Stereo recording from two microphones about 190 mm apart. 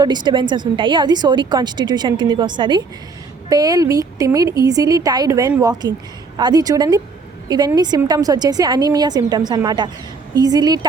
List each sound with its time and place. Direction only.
0.0 s a woman's voice: 25° right (ahead or behind)